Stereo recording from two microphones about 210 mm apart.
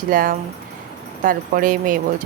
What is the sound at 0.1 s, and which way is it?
Speech, 40° right (ahead or behind).